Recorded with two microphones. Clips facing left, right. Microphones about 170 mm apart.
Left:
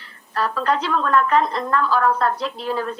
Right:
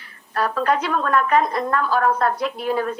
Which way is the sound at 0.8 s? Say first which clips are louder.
Left 1 dB; 50° right (ahead or behind).